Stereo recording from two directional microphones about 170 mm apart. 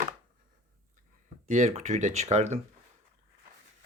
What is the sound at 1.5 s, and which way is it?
Speech, 45° right (ahead or behind).